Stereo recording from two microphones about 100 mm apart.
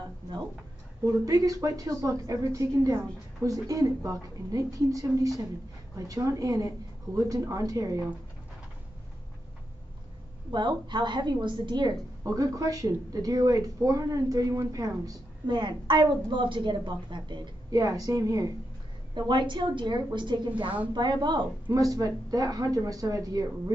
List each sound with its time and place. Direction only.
1.0 s speech: 35° right (ahead or behind)
10.5 s a woman's voice: 50° right (ahead or behind)
12.2 s speech: 35° right (ahead or behind)
19.1 s a woman's voice: 50° right (ahead or behind)
21.7 s speech: 35° right (ahead or behind)